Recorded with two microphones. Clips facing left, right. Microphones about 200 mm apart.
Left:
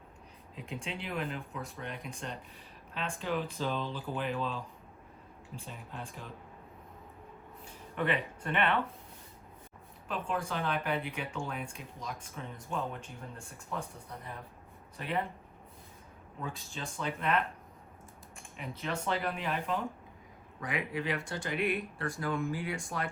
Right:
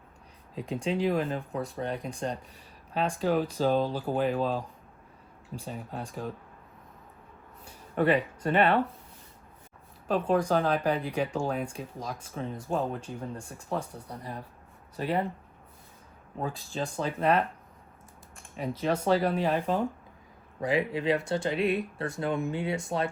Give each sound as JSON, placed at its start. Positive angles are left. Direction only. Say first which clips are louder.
{"t": 0.5, "sound": "speech", "louder": "right 11 dB", "side_deg": -35}
{"t": 7.9, "sound": "speech", "louder": "right 8 dB", "side_deg": -40}
{"t": 10.1, "sound": "speech", "louder": "right 10 dB", "side_deg": -40}
{"t": 14.9, "sound": "speech", "louder": "right 6 dB", "side_deg": -35}
{"t": 16.4, "sound": "speech", "louder": "right 8 dB", "side_deg": -35}
{"t": 18.8, "sound": "speech", "louder": "right 9 dB", "side_deg": -35}